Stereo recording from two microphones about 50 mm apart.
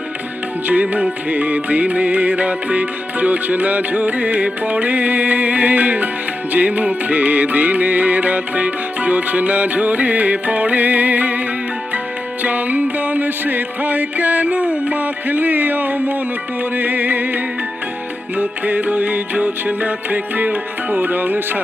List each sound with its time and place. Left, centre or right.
0.7 s music: right